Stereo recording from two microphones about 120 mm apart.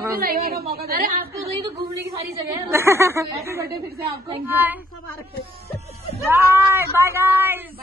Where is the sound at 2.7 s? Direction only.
20° right (ahead or behind).